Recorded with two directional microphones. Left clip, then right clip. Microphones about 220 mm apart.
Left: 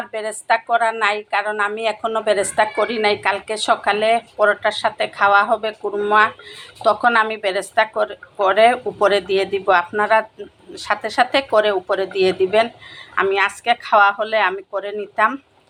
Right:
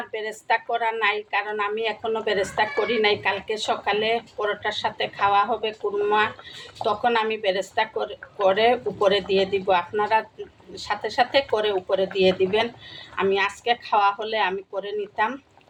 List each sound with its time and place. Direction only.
0.1 s a woman's voice: 10° left (ahead or behind)